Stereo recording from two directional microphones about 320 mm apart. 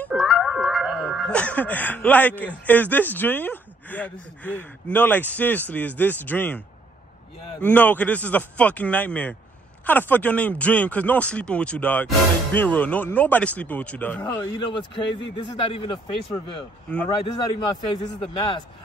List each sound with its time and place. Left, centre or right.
0.0 s music: centre
7.6 s a man's voice: centre